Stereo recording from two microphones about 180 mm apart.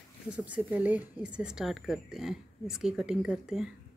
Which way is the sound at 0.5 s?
10° right (ahead or behind).